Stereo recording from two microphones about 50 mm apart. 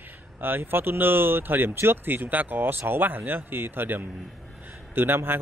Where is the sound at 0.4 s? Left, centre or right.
Right.